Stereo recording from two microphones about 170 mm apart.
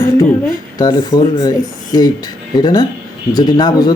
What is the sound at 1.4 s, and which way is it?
Speech, 20° left (ahead or behind).